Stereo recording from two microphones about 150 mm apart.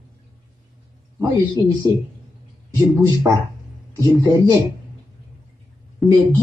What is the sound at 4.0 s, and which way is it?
Speech, 25° right (ahead or behind).